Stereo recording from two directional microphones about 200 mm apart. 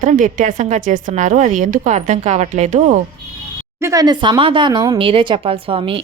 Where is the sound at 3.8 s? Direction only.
15° right (ahead or behind).